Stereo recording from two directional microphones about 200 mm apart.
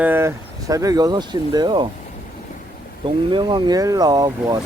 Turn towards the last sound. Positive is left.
turn(degrees=-20)  # may be behind; listen again after turning